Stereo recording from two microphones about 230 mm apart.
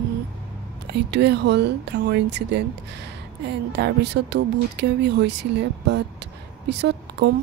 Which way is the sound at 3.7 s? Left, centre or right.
Right.